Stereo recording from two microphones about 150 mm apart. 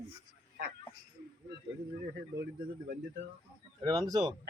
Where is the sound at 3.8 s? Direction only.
25° right (ahead or behind).